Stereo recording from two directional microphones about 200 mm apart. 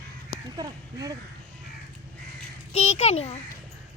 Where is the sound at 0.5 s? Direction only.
20° right (ahead or behind).